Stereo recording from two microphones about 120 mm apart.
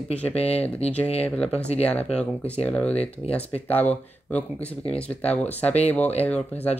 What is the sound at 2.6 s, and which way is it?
Speech, 10° left (ahead or behind).